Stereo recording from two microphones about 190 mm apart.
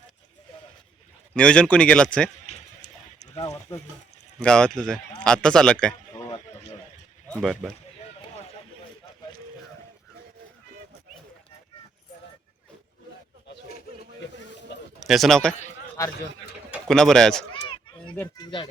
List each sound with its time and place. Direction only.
1.3 s a man's voice: 5° left (ahead or behind)
4.4 s a man's voice: 5° left (ahead or behind)
7.3 s a man's voice: centre (ahead or behind)
13.5 s a sound: 55° left (ahead or behind)
15.0 s a man's voice: centre (ahead or behind)
16.9 s a man's voice: 5° left (ahead or behind)
18.2 s speech: 20° left (ahead or behind)